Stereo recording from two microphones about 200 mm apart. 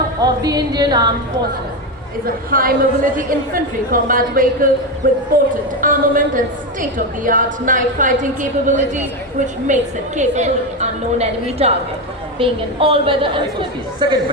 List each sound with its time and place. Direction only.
0.2 s a woman's voice: 20° right (ahead or behind)
2.2 s a woman's voice: 45° right (ahead or behind); by 14.2 s 25° right (ahead or behind)